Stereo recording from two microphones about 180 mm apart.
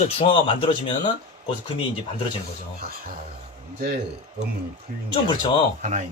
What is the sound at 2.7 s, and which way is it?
Speech, 55° right (ahead or behind).